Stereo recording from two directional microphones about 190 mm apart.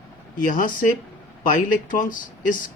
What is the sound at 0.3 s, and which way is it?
Speech, 45° left (ahead or behind).